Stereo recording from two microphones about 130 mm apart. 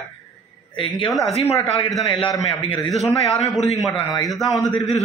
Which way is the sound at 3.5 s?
Centre (ahead or behind).